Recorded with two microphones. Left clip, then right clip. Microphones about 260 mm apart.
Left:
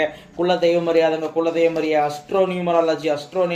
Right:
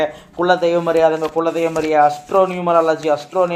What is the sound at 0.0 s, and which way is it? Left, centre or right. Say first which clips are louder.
Speech: right 3 dB; right.